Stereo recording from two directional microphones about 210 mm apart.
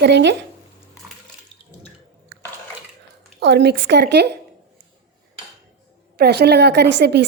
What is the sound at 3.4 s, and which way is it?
Speech, 55° right (ahead or behind).